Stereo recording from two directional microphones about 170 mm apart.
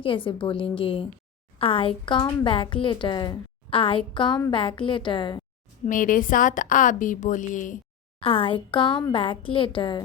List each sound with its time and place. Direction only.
0.0 s a woman's voice: 30° left (ahead or behind)
5.8 s a woman's voice: 50° left (ahead or behind)
8.2 s a woman's voice: 30° left (ahead or behind)